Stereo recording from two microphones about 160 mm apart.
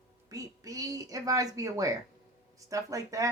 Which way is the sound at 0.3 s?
20° right (ahead or behind).